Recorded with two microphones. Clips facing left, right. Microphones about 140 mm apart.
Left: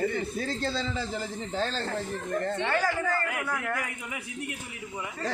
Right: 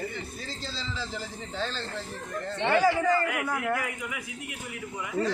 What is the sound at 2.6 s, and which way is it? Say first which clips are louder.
Speech: right 9 dB; 15° right (ahead or behind).